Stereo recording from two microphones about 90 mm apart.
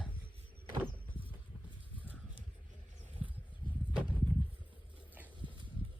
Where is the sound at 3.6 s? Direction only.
60° left (ahead or behind).